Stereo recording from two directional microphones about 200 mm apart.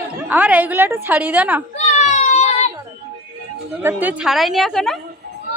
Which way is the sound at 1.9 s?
35° left (ahead or behind).